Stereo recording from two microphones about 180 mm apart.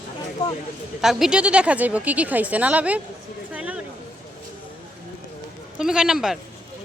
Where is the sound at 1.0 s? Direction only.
Centre (ahead or behind).